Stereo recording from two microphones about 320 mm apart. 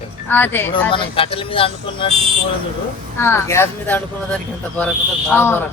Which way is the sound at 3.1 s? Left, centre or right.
Centre.